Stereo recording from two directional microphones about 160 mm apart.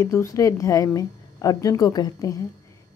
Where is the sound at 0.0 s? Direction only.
20° left (ahead or behind).